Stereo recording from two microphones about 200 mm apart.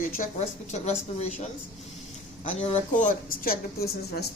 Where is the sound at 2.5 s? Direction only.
35° left (ahead or behind); by 4.3 s 50° left (ahead or behind).